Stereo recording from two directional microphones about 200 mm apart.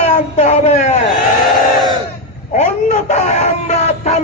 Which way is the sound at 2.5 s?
35° left (ahead or behind).